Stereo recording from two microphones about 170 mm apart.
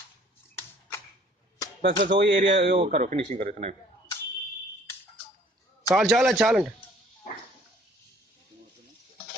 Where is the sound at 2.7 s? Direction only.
35° right (ahead or behind).